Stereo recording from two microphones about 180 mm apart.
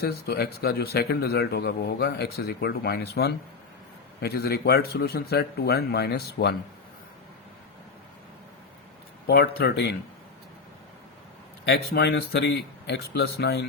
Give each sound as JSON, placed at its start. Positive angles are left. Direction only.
{"t": 0.0, "sound": "a man's voice", "side_deg": 60}
{"t": 9.2, "sound": "a man's voice", "side_deg": 60}
{"t": 11.6, "sound": "speech", "side_deg": 70}